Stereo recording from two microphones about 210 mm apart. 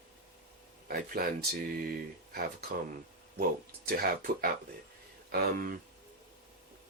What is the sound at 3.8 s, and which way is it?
Speech, 45° right (ahead or behind).